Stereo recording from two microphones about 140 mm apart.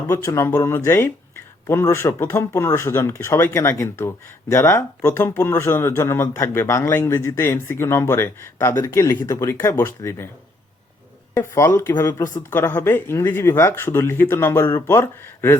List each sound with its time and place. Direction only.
0.1 s speech: 20° left (ahead or behind)
11.3 s speech: 20° left (ahead or behind)